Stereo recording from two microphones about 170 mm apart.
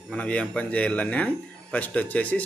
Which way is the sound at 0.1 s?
5° left (ahead or behind).